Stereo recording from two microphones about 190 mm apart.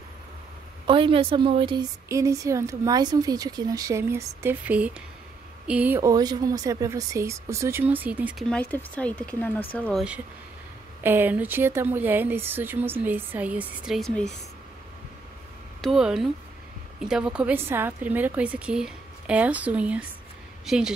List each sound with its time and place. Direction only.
0.8 s a woman's voice: 25° right (ahead or behind); by 8.5 s 5° right (ahead or behind)
8.5 s speech: 5° left (ahead or behind)
11.0 s speech: 10° right (ahead or behind)
15.8 s speech: centre (ahead or behind)